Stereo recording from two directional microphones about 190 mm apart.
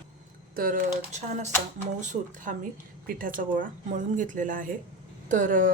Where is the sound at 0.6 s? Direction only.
45° right (ahead or behind).